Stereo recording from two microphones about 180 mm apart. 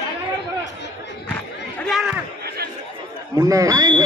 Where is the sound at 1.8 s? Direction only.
Centre (ahead or behind).